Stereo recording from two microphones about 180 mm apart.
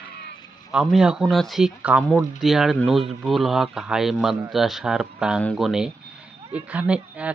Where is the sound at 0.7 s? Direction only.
Centre (ahead or behind).